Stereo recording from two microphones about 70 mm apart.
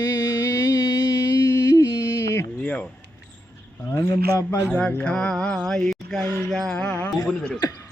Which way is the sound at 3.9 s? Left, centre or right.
Left.